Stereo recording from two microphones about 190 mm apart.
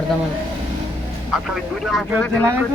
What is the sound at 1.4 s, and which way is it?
Speech, centre (ahead or behind).